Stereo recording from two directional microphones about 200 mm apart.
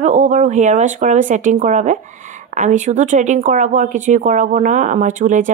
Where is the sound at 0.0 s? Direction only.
35° right (ahead or behind).